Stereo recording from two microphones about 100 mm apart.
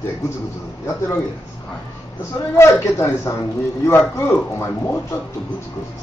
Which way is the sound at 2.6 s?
30° left (ahead or behind).